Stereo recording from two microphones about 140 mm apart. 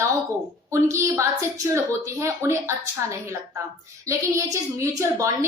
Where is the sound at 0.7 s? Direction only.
20° right (ahead or behind).